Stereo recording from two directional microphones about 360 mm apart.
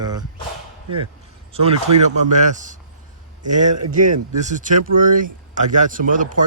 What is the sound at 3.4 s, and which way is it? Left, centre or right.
Speech, right.